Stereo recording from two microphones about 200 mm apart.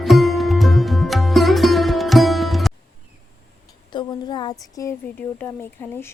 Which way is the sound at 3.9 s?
20° left (ahead or behind).